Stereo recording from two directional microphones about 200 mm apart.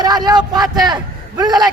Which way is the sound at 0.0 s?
20° right (ahead or behind).